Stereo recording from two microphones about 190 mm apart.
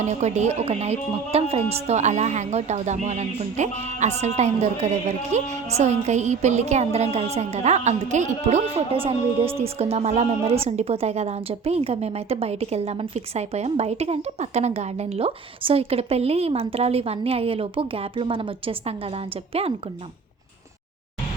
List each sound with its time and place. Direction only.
0.0 s speech: 35° right (ahead or behind)